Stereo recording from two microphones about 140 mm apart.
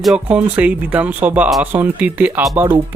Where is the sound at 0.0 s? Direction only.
5° right (ahead or behind).